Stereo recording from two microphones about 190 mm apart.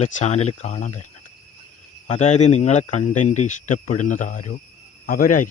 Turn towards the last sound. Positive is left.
turn(degrees=45)  # may be behind; listen again after turning